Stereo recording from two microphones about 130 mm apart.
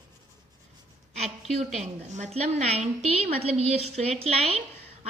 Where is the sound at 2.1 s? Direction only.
60° right (ahead or behind).